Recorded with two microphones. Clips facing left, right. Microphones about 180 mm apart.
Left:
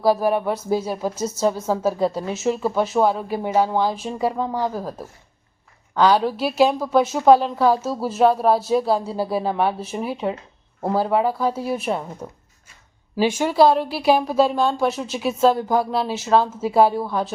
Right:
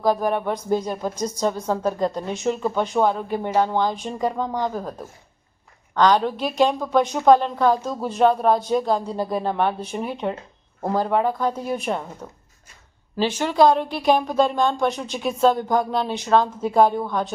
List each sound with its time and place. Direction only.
0.0 s speech: 5° left (ahead or behind)